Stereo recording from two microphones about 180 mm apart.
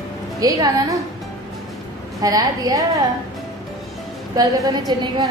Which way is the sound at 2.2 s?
20° right (ahead or behind).